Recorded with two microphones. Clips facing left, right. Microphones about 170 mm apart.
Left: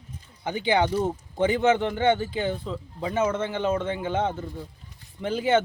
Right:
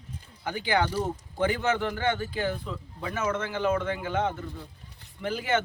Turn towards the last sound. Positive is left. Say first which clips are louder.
# left 5 dB
turn(degrees=25)  # may be behind; listen again after turning